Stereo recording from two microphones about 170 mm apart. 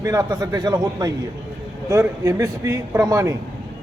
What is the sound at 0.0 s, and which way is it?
A man's voice, 20° right (ahead or behind).